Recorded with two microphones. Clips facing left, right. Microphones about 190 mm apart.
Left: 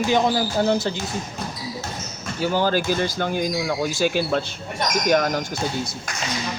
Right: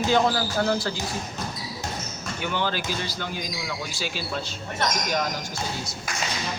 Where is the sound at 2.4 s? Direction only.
35° left (ahead or behind); by 5.4 s 60° left (ahead or behind).